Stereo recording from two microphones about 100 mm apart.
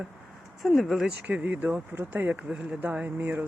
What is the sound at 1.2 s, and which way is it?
Speech, 15° right (ahead or behind).